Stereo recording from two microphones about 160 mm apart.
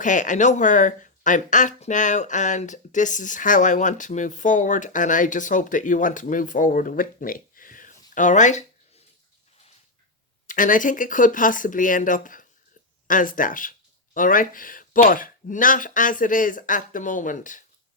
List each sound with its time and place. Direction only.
0.0 s speech: 50° left (ahead or behind)
10.4 s speech: 55° left (ahead or behind)